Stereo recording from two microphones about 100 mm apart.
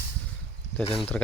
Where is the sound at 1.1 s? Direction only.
10° left (ahead or behind).